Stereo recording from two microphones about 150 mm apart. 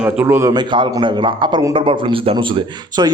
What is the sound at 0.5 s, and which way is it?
A man's voice, 30° right (ahead or behind).